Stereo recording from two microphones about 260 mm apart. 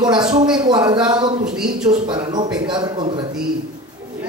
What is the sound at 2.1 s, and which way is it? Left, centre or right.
Speech, centre.